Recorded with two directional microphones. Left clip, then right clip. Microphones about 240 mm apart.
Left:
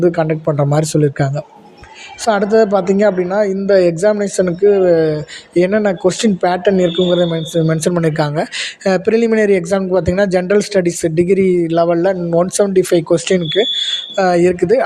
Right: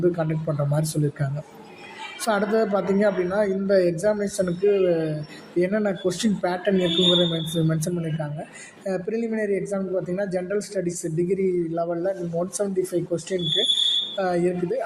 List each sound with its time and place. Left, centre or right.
0.0 s a man's voice: left